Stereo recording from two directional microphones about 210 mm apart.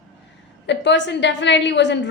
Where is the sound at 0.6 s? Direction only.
55° left (ahead or behind).